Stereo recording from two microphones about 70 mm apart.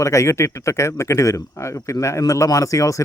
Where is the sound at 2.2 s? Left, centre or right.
Left.